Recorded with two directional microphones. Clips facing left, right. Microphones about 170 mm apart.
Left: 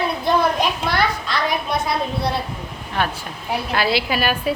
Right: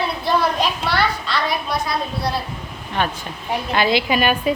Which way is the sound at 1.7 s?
25° left (ahead or behind).